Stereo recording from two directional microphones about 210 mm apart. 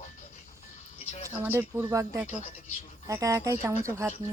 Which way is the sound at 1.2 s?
10° right (ahead or behind).